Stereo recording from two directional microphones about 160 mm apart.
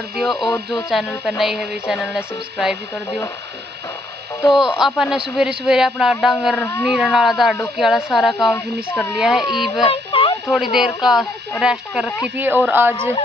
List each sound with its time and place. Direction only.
0.2 s speech: centre (ahead or behind)
4.5 s speech: 5° right (ahead or behind)
6.5 s speech: 15° left (ahead or behind)
6.8 s speech: centre (ahead or behind)
9.8 s a sound: 35° left (ahead or behind)
10.5 s speech: centre (ahead or behind)